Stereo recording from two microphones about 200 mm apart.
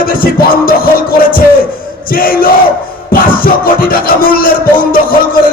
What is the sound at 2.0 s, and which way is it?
Music, 45° left (ahead or behind).